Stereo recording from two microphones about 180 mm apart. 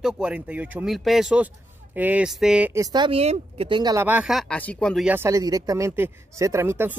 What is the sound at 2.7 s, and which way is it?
Speech, 20° right (ahead or behind).